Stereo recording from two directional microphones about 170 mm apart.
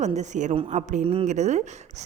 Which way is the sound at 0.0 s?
45° right (ahead or behind).